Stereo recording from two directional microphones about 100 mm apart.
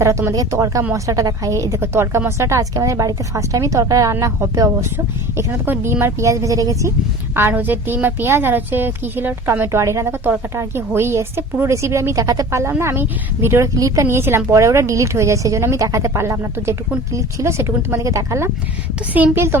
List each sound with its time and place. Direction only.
0.0 s a woman's voice: 30° right (ahead or behind)
7.3 s a woman's voice: 20° right (ahead or behind)
19.1 s a woman's voice: 15° right (ahead or behind)